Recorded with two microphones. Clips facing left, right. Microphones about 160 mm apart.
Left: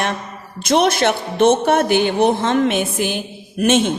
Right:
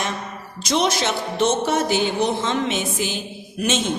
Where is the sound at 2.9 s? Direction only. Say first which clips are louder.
Left 5 dB; 55° left (ahead or behind).